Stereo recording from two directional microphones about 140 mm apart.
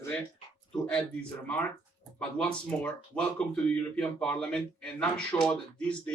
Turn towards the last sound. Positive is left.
turn(degrees=10)  # may be behind; listen again after turning